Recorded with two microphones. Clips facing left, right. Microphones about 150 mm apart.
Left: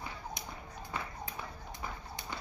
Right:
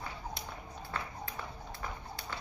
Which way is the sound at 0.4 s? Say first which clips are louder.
Right 1 dB; 20° left (ahead or behind).